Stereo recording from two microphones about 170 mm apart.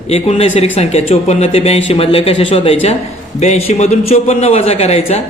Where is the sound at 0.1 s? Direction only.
40° left (ahead or behind).